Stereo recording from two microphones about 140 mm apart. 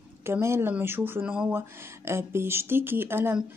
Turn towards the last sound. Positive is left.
turn(degrees=-15)  # may be behind; listen again after turning